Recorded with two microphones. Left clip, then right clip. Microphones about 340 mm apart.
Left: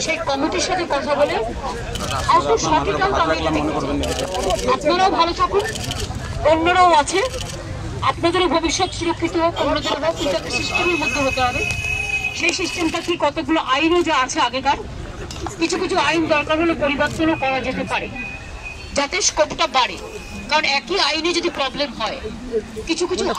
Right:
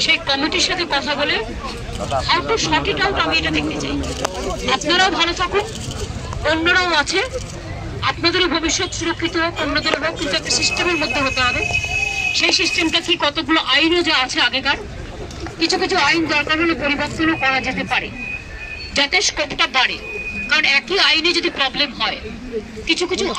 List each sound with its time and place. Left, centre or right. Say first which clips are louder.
0.0 s speech: right 3 dB; centre
4.6 s speech: right 2 dB; centre